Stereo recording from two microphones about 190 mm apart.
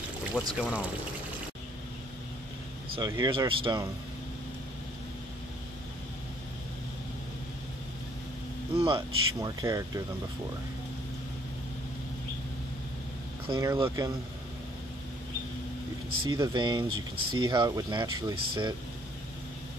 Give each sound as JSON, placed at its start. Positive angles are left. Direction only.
{"t": 0.4, "sound": "speech", "side_deg": 10}
{"t": 3.0, "sound": "speech", "side_deg": -20}
{"t": 8.7, "sound": "speech", "side_deg": -25}
{"t": 13.5, "sound": "speech", "side_deg": -20}
{"t": 16.3, "sound": "speech", "side_deg": -25}